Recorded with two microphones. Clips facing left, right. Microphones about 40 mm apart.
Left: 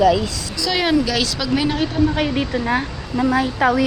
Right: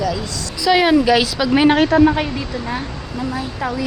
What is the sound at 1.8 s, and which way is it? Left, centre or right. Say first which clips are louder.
Speech: right 6 dB; right.